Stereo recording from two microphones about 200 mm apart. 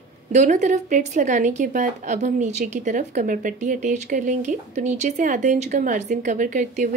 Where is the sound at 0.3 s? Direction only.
35° right (ahead or behind).